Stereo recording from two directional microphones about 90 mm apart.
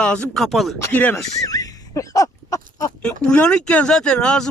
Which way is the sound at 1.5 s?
45° left (ahead or behind).